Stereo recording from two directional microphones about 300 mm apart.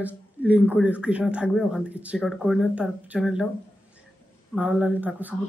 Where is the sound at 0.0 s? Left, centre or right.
Centre.